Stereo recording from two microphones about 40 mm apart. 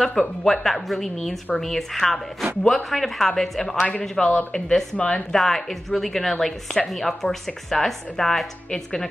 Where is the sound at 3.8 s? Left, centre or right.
Left.